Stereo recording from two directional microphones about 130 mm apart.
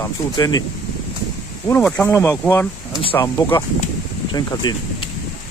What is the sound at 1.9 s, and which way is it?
Speech, 15° left (ahead or behind).